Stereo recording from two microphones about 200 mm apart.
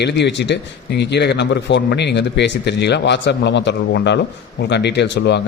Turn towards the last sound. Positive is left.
turn(degrees=60)  # may be behind; listen again after turning